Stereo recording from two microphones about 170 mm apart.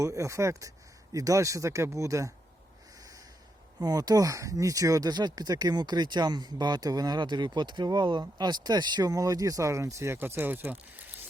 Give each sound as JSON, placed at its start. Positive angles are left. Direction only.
{"t": 0.0, "sound": "speech", "side_deg": -20}
{"t": 3.0, "sound": "snort", "side_deg": -20}
{"t": 3.8, "sound": "speech", "side_deg": -25}